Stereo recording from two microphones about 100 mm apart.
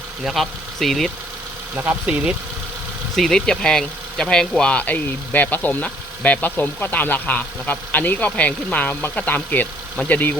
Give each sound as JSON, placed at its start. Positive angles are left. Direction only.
{"t": 0.3, "sound": "speech", "side_deg": 0}
{"t": 1.7, "sound": "speech", "side_deg": -15}
{"t": 3.2, "sound": "speech", "side_deg": 5}